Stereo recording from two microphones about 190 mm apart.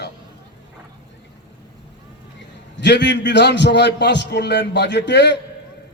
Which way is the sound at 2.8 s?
65° left (ahead or behind).